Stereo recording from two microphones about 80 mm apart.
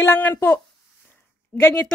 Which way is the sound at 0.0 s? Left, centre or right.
Left.